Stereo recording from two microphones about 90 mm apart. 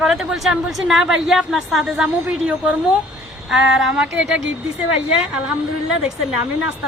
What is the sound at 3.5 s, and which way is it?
Speech, 5° right (ahead or behind).